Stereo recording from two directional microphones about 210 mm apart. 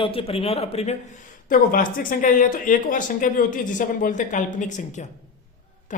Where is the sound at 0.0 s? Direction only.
25° left (ahead or behind).